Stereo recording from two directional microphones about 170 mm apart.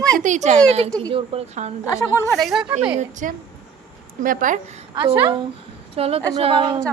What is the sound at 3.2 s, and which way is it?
Speech, 50° right (ahead or behind).